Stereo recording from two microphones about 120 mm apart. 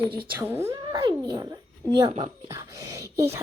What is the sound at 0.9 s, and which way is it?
Speech, 35° right (ahead or behind).